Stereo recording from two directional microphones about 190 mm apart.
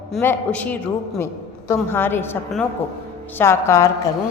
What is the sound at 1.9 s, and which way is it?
A woman's voice, 10° left (ahead or behind).